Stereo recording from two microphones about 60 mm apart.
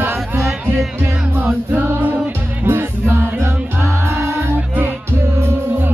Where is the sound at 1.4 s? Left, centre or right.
Right.